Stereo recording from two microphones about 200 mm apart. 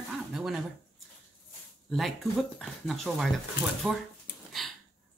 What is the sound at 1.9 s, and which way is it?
Speech, centre (ahead or behind).